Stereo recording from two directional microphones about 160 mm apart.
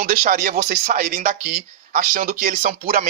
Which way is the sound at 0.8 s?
50° right (ahead or behind).